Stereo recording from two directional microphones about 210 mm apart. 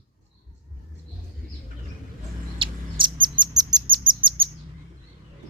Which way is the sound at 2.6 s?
20° right (ahead or behind).